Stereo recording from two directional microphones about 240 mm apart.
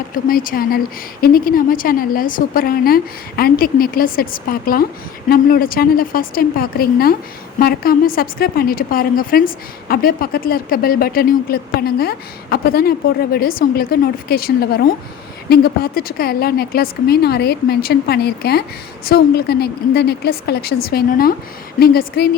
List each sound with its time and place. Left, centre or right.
0.1 s a woman's voice: left